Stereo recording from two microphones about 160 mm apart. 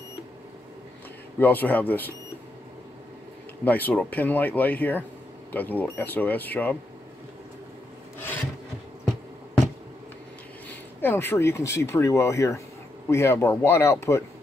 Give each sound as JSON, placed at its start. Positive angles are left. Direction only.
{"t": 1.4, "sound": "speech", "side_deg": 10}
{"t": 3.6, "sound": "speech", "side_deg": 10}
{"t": 10.7, "sound": "speech", "side_deg": 15}